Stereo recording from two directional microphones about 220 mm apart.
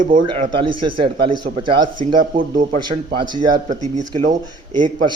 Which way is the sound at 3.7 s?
30° right (ahead or behind).